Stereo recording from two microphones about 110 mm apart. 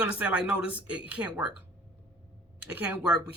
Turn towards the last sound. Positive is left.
turn(degrees=-10)  # may be behind; listen again after turning